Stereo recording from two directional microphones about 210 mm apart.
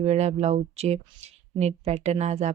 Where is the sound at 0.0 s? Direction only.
30° right (ahead or behind).